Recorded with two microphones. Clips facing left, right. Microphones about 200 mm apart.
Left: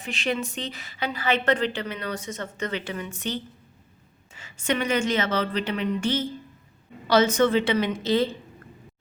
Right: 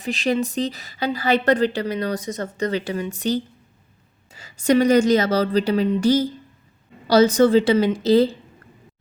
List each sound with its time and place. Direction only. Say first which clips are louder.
0.0 s a woman's voice: right 6 dB; 35° right (ahead or behind)